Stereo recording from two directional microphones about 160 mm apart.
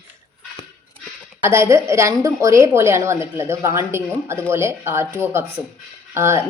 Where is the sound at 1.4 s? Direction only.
15° right (ahead or behind).